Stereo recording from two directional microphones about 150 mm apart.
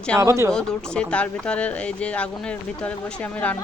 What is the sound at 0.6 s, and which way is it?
Speech, 5° left (ahead or behind).